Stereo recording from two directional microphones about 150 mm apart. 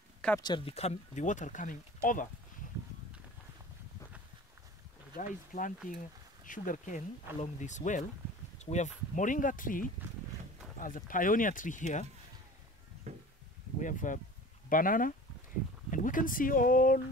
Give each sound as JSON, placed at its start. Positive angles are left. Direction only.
{"t": 0.4, "sound": "speech", "side_deg": 30}
{"t": 5.1, "sound": "speech", "side_deg": 65}
{"t": 13.1, "sound": "a sound", "side_deg": -45}
{"t": 13.7, "sound": "speech", "side_deg": 60}